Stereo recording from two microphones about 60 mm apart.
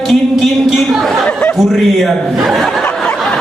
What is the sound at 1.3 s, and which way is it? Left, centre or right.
Speech, centre.